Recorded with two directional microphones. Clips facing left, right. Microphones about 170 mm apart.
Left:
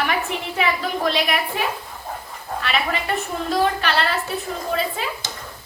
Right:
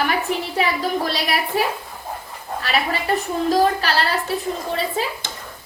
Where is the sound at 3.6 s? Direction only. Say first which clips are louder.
Left 1 dB; 35° right (ahead or behind).